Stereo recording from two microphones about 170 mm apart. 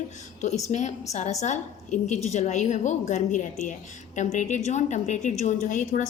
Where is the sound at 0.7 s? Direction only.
45° left (ahead or behind).